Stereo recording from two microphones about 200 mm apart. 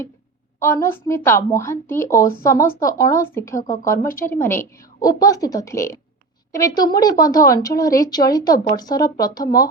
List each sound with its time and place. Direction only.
0.6 s a woman's voice: 15° left (ahead or behind)
3.9 s a woman's voice: 45° left (ahead or behind)
4.3 s a woman's voice: 10° left (ahead or behind)